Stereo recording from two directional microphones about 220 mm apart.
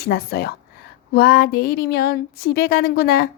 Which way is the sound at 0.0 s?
45° left (ahead or behind).